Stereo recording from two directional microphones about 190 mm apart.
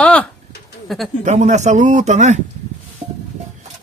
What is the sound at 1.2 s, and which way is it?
Speech, 35° right (ahead or behind).